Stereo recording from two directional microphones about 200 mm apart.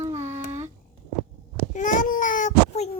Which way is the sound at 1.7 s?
40° left (ahead or behind).